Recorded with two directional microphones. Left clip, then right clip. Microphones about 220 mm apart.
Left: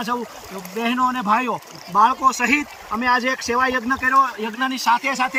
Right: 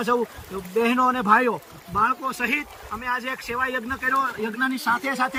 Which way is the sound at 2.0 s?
25° left (ahead or behind).